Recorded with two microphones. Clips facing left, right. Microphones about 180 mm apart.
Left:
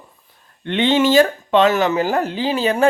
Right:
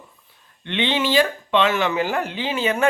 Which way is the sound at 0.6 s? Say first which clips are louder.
Left 7 dB; 45° left (ahead or behind).